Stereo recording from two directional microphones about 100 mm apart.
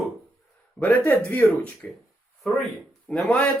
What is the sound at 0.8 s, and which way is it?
Speech, 15° left (ahead or behind).